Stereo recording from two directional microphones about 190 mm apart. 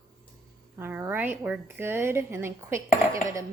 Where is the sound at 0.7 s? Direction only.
10° right (ahead or behind).